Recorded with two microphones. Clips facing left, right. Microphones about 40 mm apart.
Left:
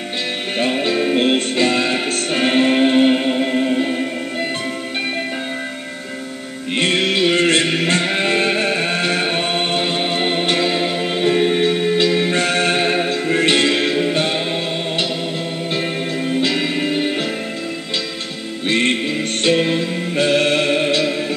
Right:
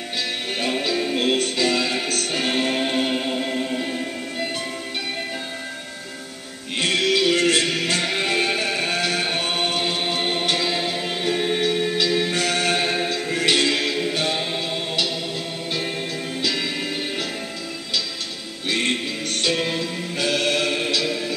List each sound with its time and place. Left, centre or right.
0.6 s music: left
6.8 s music: left
18.7 s music: left